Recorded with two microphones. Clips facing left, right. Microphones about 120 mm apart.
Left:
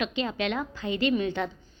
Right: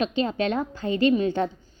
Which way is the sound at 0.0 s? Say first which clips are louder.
Right 4 dB; 40° right (ahead or behind).